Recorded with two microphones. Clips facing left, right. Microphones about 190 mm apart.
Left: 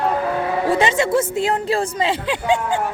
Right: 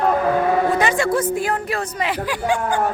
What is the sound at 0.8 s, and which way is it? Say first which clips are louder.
A woman's voice: left 1 dB; 25° left (ahead or behind).